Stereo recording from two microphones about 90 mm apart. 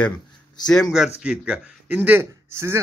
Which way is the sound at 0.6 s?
5° left (ahead or behind).